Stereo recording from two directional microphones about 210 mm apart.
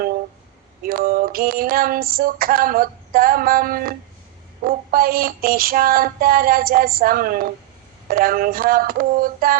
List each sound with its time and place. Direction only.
0.8 s female singing: 45° right (ahead or behind)